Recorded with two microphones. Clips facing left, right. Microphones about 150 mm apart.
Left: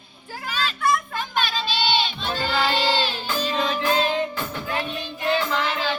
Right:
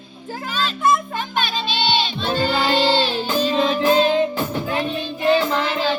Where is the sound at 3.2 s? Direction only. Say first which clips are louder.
Right 6 dB; 20° right (ahead or behind).